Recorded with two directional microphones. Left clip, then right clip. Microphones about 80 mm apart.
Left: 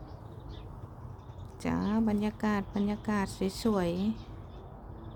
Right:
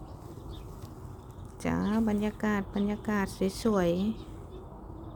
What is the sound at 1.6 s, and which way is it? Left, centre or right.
Speech, centre.